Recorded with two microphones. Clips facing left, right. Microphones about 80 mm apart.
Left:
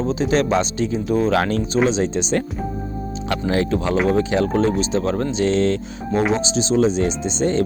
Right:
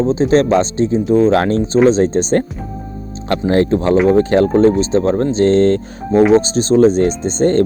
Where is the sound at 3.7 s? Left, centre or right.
Right.